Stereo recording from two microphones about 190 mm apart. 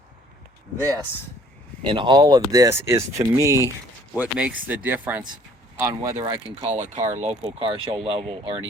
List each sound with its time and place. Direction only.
1.8 s speech: 25° right (ahead or behind)